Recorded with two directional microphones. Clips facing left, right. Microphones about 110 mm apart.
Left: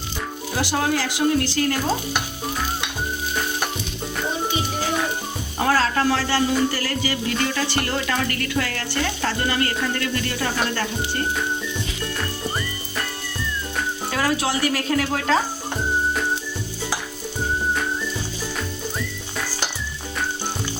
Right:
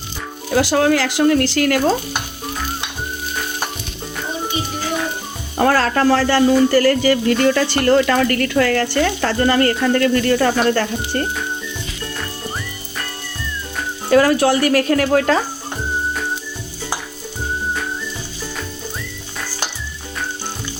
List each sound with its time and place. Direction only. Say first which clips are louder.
0.5 s speech: right 8 dB; 90° right
5.5 s speech: right 5 dB; 60° right (ahead or behind)
7.9 s speech: right 10 dB; 65° right (ahead or behind)
14.1 s speech: right 11 dB; 55° right (ahead or behind)